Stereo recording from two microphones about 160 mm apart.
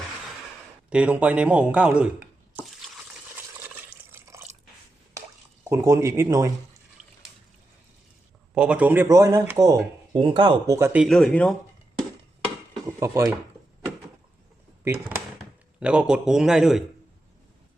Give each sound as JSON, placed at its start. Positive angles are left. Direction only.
{"t": 0.9, "sound": "speech", "side_deg": -5}
{"t": 3.3, "sound": "a sound", "side_deg": -15}
{"t": 5.6, "sound": "speech", "side_deg": -20}
{"t": 8.5, "sound": "speech", "side_deg": -5}
{"t": 10.8, "sound": "speech", "side_deg": -15}
{"t": 11.0, "sound": "speech", "side_deg": 0}
{"t": 13.0, "sound": "speech", "side_deg": -20}
{"t": 15.8, "sound": "speech", "side_deg": -5}